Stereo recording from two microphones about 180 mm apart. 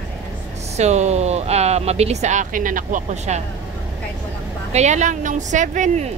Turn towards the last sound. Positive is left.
turn(degrees=-45)  # may be behind; listen again after turning